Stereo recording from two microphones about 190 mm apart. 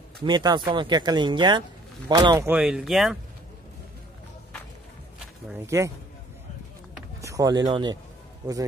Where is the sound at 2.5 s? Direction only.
5° right (ahead or behind).